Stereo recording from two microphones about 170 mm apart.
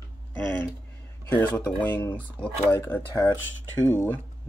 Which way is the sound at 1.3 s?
10° left (ahead or behind).